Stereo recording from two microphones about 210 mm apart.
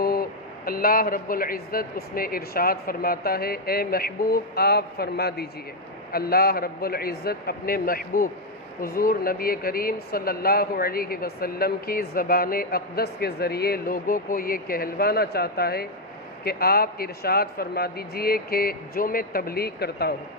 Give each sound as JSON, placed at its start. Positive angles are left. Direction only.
{"t": 0.0, "sound": "speech", "side_deg": 45}